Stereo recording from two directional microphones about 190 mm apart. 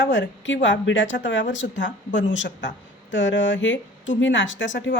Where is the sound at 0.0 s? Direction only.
75° left (ahead or behind).